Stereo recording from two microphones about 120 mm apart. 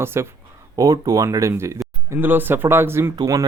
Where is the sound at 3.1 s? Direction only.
30° right (ahead or behind).